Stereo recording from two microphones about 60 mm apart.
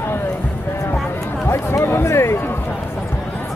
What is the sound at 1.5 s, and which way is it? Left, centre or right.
Music, left.